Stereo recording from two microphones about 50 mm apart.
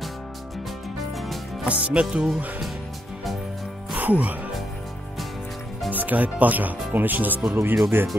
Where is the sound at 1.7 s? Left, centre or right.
Right.